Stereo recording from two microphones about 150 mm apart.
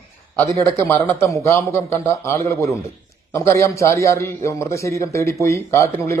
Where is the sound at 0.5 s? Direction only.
15° left (ahead or behind).